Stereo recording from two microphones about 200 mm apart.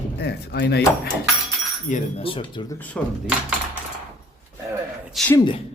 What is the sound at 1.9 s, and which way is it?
Speech, 35° left (ahead or behind).